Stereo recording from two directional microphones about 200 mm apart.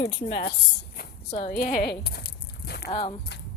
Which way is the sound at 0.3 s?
50° left (ahead or behind).